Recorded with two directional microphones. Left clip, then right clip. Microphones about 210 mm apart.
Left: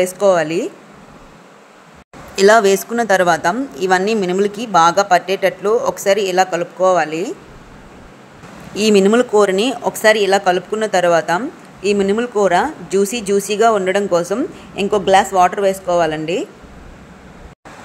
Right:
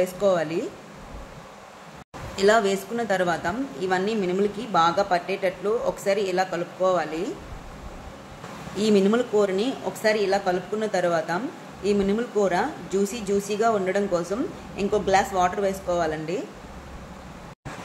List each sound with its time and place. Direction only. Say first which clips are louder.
0.0 s speech: left 8 dB; 40° left (ahead or behind)
2.3 s speech: left 9 dB; 45° left (ahead or behind)
8.7 s speech: left 9 dB; 45° left (ahead or behind)